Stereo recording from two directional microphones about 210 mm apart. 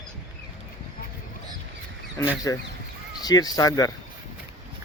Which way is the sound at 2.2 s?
15° left (ahead or behind).